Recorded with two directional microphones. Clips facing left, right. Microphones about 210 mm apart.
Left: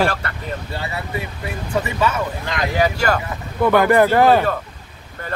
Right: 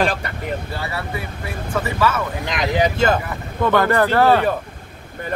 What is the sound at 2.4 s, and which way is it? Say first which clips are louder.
Speech: right 1 dB; 20° right (ahead or behind).